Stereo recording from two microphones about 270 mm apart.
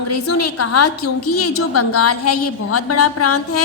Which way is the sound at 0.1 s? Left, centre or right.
Left.